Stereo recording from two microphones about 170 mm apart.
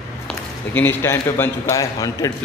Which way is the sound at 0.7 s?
15° left (ahead or behind).